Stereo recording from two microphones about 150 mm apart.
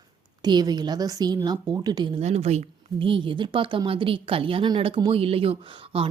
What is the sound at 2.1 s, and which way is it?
Speech, 45° right (ahead or behind).